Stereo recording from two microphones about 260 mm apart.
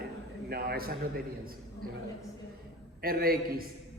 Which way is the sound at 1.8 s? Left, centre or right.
Right.